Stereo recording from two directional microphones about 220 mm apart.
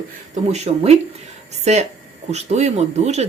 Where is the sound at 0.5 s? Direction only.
30° right (ahead or behind).